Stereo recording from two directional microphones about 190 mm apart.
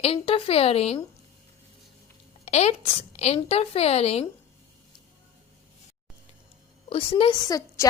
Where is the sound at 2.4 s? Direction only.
35° left (ahead or behind).